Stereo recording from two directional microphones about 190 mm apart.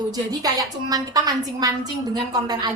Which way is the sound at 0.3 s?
20° right (ahead or behind).